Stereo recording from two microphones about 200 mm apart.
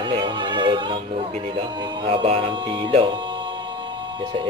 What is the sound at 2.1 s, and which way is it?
Music, 30° right (ahead or behind).